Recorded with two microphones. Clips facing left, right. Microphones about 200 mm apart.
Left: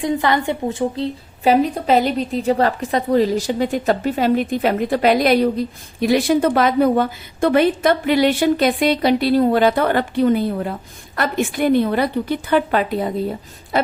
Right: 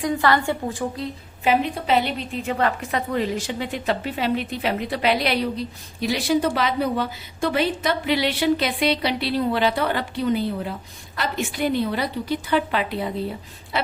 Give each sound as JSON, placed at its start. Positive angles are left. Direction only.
{"t": 0.0, "sound": "a woman's voice", "side_deg": 20}
{"t": 1.5, "sound": "a woman's voice", "side_deg": 40}